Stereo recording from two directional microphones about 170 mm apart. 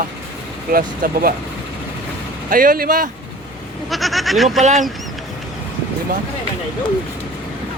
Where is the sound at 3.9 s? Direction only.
Centre (ahead or behind).